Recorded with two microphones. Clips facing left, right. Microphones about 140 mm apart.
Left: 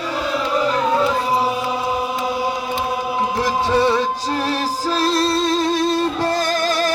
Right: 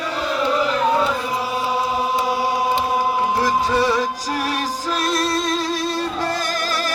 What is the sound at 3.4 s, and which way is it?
Music, 25° left (ahead or behind).